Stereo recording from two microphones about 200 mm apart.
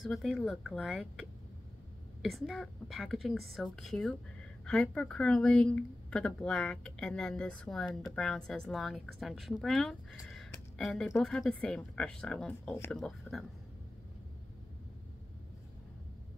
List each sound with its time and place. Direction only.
0.0 s speech: centre (ahead or behind)
2.2 s speech: centre (ahead or behind)
10.2 s a sound: centre (ahead or behind)
10.8 s speech: centre (ahead or behind)